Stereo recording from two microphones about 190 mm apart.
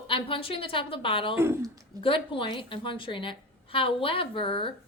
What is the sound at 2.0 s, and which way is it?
A woman's voice, 30° left (ahead or behind).